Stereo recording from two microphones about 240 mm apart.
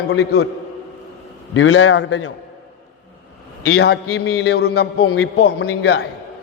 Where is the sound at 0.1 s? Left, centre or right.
Left.